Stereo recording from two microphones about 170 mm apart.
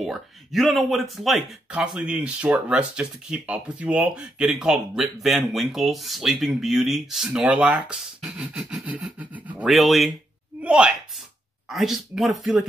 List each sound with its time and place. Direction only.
0.0 s speech: centre (ahead or behind)
10.6 s gasp: 5° right (ahead or behind)
11.7 s speech: centre (ahead or behind)